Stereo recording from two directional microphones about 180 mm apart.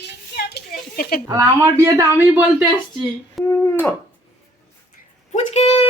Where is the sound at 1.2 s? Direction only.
15° right (ahead or behind).